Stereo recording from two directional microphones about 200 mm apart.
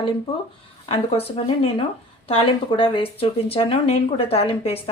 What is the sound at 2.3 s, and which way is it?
Speech, 25° left (ahead or behind).